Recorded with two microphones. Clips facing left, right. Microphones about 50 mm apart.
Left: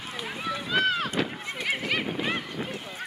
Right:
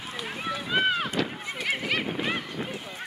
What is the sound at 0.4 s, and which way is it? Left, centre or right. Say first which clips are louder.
Run: even; centre.